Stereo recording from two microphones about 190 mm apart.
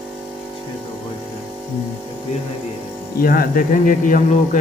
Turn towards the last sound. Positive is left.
turn(degrees=45)  # may be behind; listen again after turning